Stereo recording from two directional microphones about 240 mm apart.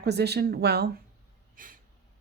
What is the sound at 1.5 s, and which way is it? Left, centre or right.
Gasp, right.